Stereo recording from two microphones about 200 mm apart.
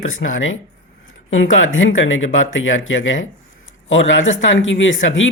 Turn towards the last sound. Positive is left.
turn(degrees=70)  # may be behind; listen again after turning